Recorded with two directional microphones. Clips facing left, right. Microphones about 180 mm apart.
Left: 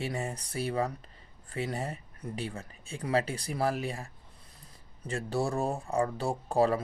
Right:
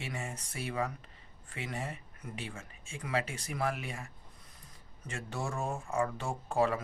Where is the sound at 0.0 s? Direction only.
35° left (ahead or behind).